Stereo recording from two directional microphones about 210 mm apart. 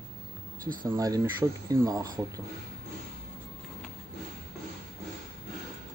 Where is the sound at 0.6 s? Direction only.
40° right (ahead or behind).